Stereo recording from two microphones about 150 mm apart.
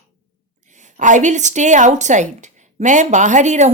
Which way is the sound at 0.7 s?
55° right (ahead or behind).